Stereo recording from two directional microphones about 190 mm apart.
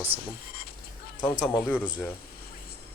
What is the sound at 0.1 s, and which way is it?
Speech, 30° right (ahead or behind).